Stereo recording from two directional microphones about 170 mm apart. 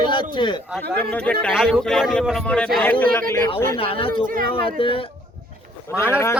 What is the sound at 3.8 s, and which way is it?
Speech, 35° left (ahead or behind).